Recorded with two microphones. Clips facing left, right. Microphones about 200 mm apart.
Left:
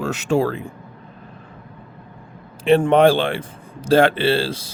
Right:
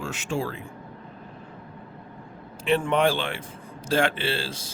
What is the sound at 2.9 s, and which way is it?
Speech, 30° left (ahead or behind).